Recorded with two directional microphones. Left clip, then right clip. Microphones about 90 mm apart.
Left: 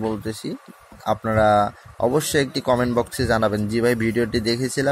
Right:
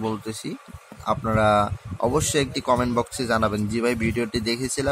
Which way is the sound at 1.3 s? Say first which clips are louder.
Left 3 dB; 25° left (ahead or behind).